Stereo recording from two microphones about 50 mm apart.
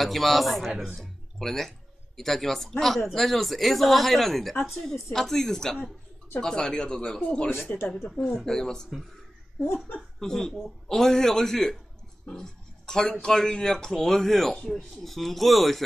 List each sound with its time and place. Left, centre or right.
0.0 s speech: centre
0.9 s a sound: centre
2.1 s a man's voice: centre
7.2 s speech: left
7.5 s speech: left
8.0 s speech: centre
8.5 s a man's voice: centre
10.1 s a man's voice: centre
12.3 s a sound: centre
13.2 s a man's voice: centre